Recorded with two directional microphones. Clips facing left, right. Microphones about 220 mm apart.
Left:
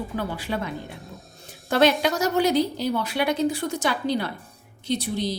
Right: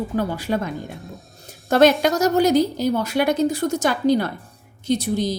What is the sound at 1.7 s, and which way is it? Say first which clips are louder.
A woman's voice: right 5 dB; 45° right (ahead or behind).